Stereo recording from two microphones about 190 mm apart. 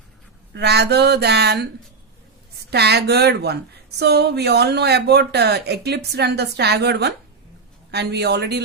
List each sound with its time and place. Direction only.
0.5 s a woman's voice: 60° right (ahead or behind)
2.6 s a woman's voice: 60° right (ahead or behind)